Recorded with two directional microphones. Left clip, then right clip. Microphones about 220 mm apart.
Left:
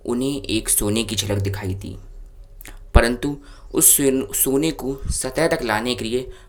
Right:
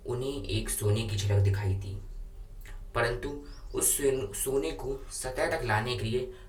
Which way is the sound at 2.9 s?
45° left (ahead or behind).